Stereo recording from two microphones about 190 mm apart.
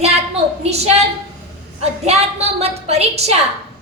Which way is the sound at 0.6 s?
35° right (ahead or behind).